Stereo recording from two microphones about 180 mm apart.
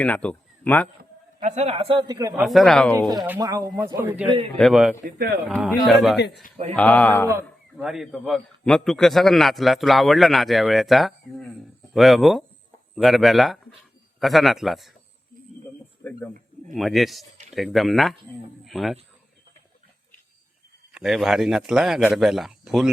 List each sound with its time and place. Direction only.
0.0 s a man's voice: 5° left (ahead or behind)
1.4 s a man's voice: 40° right (ahead or behind); by 2.3 s 20° right (ahead or behind)
2.3 s a man's voice: centre (ahead or behind)
3.4 s a man's voice: 20° right (ahead or behind)
4.5 s a man's voice: centre (ahead or behind)
5.0 s speech: 60° right (ahead or behind)
5.5 s a man's voice: centre (ahead or behind)
7.8 s a man's voice: centre (ahead or behind)
16.0 s speech: 10° left (ahead or behind)
16.7 s a man's voice: centre (ahead or behind)
20.9 s a man's voice: centre (ahead or behind)